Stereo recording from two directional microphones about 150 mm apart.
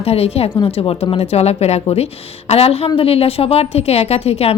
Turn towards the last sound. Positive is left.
turn(degrees=45)  # may be behind; listen again after turning